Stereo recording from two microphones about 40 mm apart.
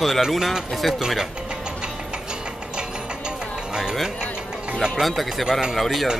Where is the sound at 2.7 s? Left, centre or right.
Right.